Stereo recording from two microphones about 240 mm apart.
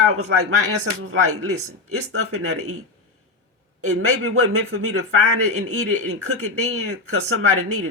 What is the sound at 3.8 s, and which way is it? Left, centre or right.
Speech, right.